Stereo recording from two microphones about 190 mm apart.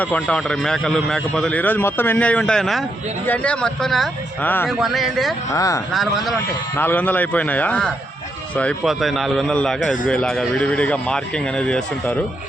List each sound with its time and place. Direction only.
0.0 s a man's voice: 5° left (ahead or behind)
5.5 s a man's voice: 15° left (ahead or behind)
5.9 s a man's voice: centre (ahead or behind)